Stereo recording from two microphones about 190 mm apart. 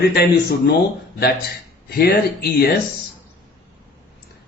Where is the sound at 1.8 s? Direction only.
55° left (ahead or behind).